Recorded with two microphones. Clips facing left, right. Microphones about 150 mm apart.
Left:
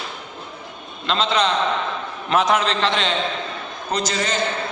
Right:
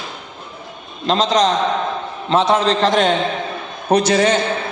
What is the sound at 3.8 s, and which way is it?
Speech, 60° right (ahead or behind).